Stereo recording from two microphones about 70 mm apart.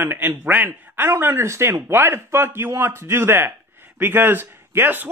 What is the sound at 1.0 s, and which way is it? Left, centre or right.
A man's voice, right.